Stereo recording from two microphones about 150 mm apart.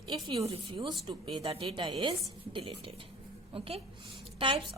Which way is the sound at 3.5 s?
40° right (ahead or behind).